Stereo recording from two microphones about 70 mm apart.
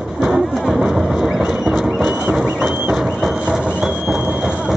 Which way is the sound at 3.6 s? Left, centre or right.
Centre.